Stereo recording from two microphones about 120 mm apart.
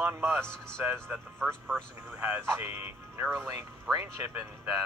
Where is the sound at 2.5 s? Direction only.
20° right (ahead or behind).